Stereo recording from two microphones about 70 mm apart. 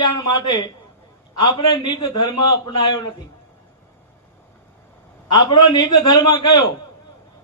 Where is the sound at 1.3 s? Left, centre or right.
Left.